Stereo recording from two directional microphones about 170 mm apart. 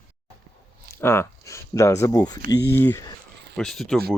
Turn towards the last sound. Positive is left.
turn(degrees=5)  # may be behind; listen again after turning